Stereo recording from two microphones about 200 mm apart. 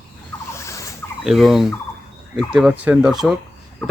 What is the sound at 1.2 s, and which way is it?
Speech, centre (ahead or behind).